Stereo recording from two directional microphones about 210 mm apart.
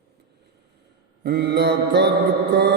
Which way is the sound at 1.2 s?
50° right (ahead or behind).